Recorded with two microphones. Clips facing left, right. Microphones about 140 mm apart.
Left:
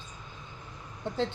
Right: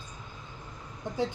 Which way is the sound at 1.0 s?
15° right (ahead or behind).